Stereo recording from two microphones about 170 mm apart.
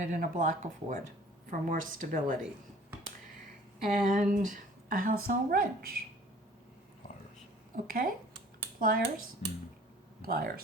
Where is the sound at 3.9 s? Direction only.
50° right (ahead or behind).